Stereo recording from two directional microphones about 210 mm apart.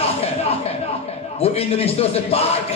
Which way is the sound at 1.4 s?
30° left (ahead or behind).